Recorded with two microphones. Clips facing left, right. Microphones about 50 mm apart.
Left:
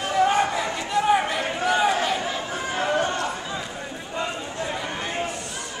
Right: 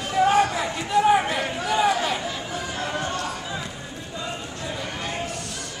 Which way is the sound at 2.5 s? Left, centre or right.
Left.